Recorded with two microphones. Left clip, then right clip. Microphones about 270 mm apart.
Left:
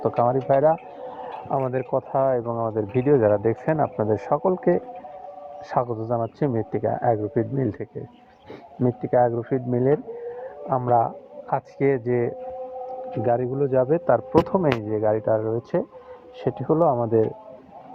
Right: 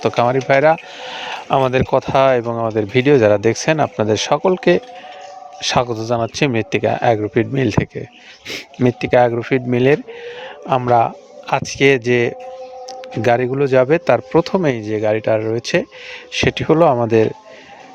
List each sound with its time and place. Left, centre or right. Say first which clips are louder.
0.2 s speech: right 5 dB; right
8.8 s speech: right 7 dB; right
12.9 s a man's voice: right 7 dB; right